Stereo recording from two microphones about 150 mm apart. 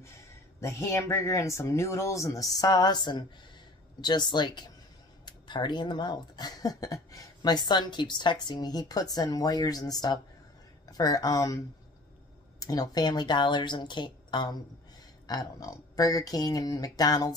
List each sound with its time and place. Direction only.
0.6 s speech: 20° left (ahead or behind)